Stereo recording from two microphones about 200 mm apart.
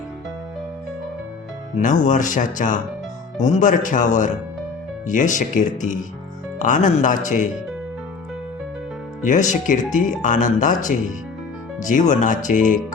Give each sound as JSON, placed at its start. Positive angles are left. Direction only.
{"t": 1.8, "sound": "speech", "side_deg": 40}
{"t": 9.2, "sound": "speech", "side_deg": 40}